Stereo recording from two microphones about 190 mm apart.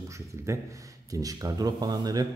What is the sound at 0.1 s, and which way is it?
A man's voice, 15° right (ahead or behind).